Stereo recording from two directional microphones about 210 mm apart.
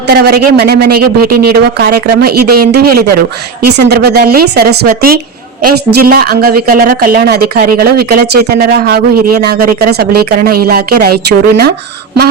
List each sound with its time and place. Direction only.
0.1 s a woman's voice: 50° right (ahead or behind)